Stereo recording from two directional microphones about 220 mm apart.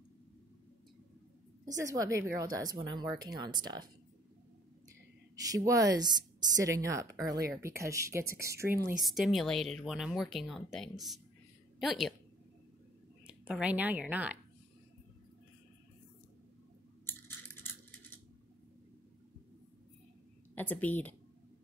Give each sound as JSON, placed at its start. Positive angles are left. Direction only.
{"t": 1.8, "sound": "speech", "side_deg": -15}
{"t": 5.5, "sound": "speech", "side_deg": -15}
{"t": 9.0, "sound": "speech", "side_deg": 0}
{"t": 13.3, "sound": "speech", "side_deg": -5}
{"t": 20.5, "sound": "speech", "side_deg": 10}